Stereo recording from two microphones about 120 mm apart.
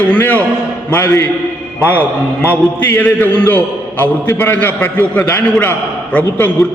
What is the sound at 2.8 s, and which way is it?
A man's voice, 15° left (ahead or behind).